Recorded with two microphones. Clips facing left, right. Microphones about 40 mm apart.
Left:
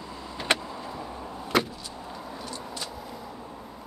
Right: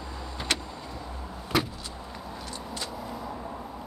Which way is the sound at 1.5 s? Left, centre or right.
Centre.